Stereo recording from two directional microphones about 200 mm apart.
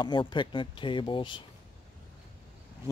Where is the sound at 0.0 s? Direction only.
20° left (ahead or behind).